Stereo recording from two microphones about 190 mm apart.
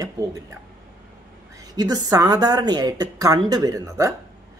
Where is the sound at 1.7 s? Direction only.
20° right (ahead or behind).